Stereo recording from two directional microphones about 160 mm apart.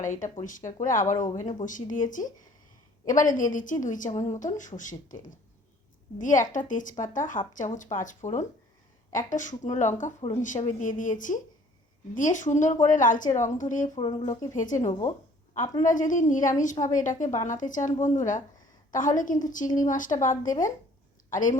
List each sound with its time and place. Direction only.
0.0 s a woman's voice: 50° left (ahead or behind)
13.9 s speech: 30° left (ahead or behind)
14.5 s a woman's voice: 55° left (ahead or behind)
14.8 s speech: 20° left (ahead or behind)
15.9 s a woman's voice: 55° left (ahead or behind)
20.1 s speech: 30° left (ahead or behind)
21.2 s a woman's voice: 55° left (ahead or behind)